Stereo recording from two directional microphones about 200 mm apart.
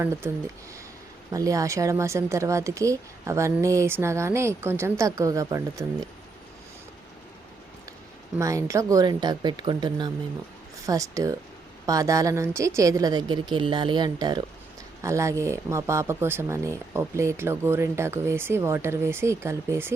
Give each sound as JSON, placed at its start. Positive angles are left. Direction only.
{"t": 1.3, "sound": "speech", "side_deg": -15}
{"t": 8.4, "sound": "a woman's voice", "side_deg": -15}